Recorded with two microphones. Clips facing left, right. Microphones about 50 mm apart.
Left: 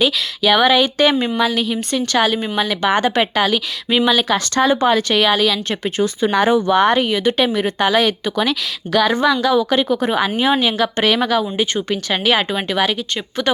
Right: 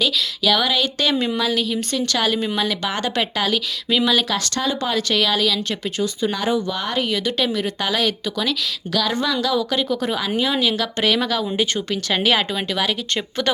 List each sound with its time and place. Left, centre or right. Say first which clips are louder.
0.0 s speech: left 3 dB; left
4.4 s speech: left 7 dB; left
5.8 s speech: left 4 dB; left
7.0 s speech: left 5 dB; left
11.0 s speech: left 3 dB; centre